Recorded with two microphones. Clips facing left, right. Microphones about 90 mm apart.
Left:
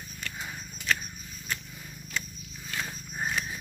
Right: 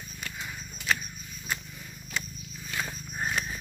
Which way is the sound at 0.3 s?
25° left (ahead or behind).